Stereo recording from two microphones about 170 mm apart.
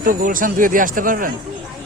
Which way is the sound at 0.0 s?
55° right (ahead or behind).